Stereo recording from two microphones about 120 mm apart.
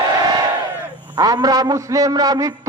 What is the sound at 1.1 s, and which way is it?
A man's voice, 35° right (ahead or behind).